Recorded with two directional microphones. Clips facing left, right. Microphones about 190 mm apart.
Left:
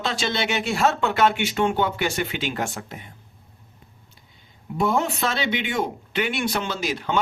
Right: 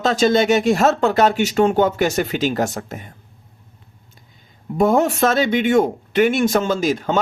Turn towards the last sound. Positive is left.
turn(degrees=-45)  # may be behind; listen again after turning